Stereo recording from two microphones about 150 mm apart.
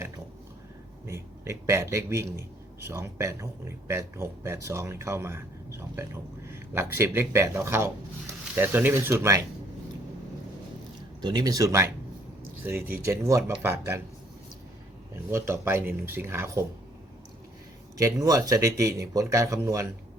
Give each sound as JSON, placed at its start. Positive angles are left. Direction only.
{"t": 1.0, "sound": "speech", "side_deg": -20}
{"t": 11.2, "sound": "speech", "side_deg": -25}
{"t": 15.3, "sound": "speech", "side_deg": -15}
{"t": 17.9, "sound": "speech", "side_deg": -25}